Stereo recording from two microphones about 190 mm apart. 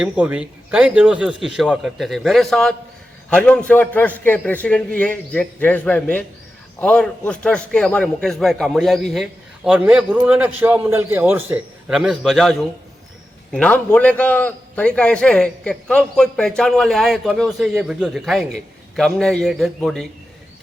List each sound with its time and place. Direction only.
0.0 s a man's voice: 5° right (ahead or behind)